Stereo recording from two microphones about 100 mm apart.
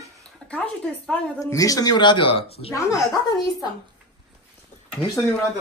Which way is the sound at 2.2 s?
70° left (ahead or behind).